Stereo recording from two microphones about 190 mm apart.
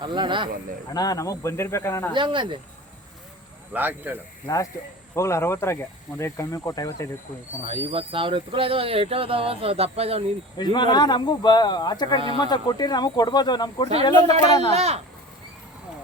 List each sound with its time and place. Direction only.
0.0 s speech: 25° right (ahead or behind)
0.9 s speech: 20° left (ahead or behind)
2.1 s speech: 25° right (ahead or behind)
3.7 s speech: 10° right (ahead or behind)
4.4 s speech: 20° left (ahead or behind)
7.7 s speech: 30° right (ahead or behind)
10.6 s speech: 25° left (ahead or behind)
14.7 s speech: 35° right (ahead or behind)